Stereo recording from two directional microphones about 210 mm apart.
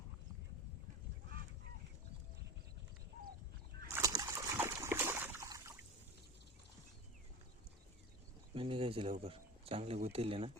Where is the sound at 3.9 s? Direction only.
15° right (ahead or behind).